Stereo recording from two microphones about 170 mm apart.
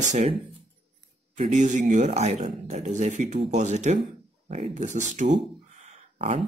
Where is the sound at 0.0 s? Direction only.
45° right (ahead or behind).